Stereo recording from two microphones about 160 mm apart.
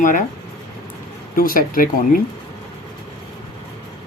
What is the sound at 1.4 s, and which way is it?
Speech, 60° left (ahead or behind).